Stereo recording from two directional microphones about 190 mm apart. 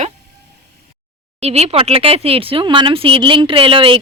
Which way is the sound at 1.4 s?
35° right (ahead or behind).